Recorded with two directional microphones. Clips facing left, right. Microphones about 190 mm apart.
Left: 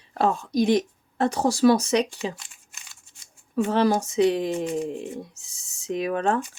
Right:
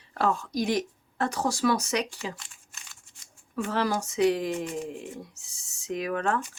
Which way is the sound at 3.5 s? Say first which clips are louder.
Left 7 dB; 25° left (ahead or behind).